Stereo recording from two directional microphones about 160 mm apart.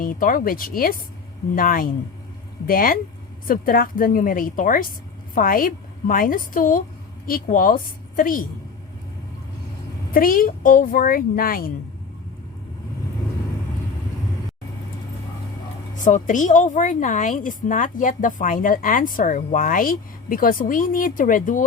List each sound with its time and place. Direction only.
0.0 s a woman's voice: 60° left (ahead or behind)
10.1 s a woman's voice: 65° left (ahead or behind)
16.0 s a woman's voice: 50° left (ahead or behind)